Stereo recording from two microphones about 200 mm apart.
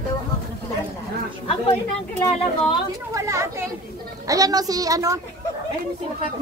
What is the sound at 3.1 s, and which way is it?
A woman's voice, 15° right (ahead or behind).